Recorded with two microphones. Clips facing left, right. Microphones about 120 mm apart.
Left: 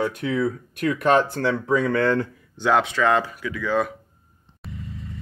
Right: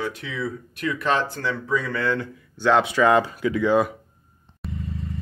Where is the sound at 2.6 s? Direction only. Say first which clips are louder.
Right 1 dB; 10° left (ahead or behind).